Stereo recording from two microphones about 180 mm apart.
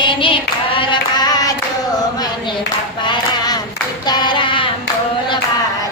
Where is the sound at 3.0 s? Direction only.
25° left (ahead or behind).